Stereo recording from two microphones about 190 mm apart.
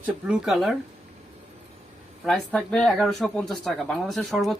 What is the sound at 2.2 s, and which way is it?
Speech, centre (ahead or behind).